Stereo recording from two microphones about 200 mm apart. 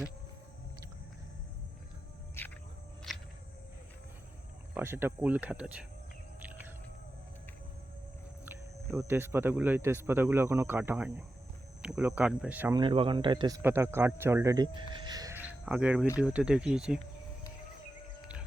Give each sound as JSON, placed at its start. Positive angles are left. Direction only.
{"t": 2.4, "sound": "insect", "side_deg": 10}
{"t": 3.1, "sound": "cricket", "side_deg": 0}
{"t": 4.7, "sound": "speech", "side_deg": -10}
{"t": 6.4, "sound": "whale vocalization", "side_deg": -10}
{"t": 8.4, "sound": "speech", "side_deg": -10}
{"t": 12.7, "sound": "speech", "side_deg": -25}
{"t": 13.6, "sound": "speech", "side_deg": -10}
{"t": 15.6, "sound": "speech", "side_deg": -5}